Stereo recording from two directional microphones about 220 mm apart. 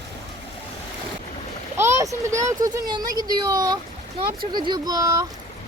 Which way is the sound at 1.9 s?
15° right (ahead or behind).